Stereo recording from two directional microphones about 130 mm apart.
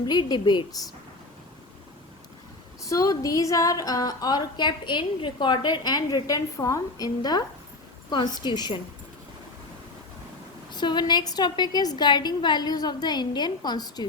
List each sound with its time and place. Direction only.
0.0 s a woman's voice: 30° left (ahead or behind)
2.8 s a woman's voice: 25° left (ahead or behind)
10.7 s a woman's voice: 35° left (ahead or behind)